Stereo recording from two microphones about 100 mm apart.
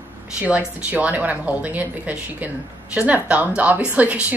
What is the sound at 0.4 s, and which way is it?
A woman's voice, 10° right (ahead or behind).